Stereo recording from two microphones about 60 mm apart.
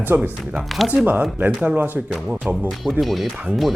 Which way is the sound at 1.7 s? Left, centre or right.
Right.